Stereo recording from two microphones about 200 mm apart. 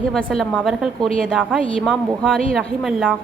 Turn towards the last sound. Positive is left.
turn(degrees=0)  # may be behind; listen again after turning